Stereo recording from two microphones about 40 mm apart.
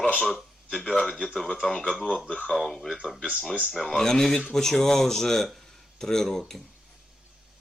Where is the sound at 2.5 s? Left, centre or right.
Centre.